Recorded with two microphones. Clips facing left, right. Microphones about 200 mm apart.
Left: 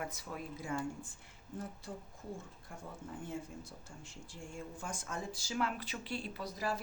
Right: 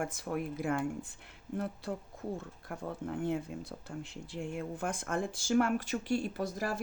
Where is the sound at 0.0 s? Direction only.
55° right (ahead or behind).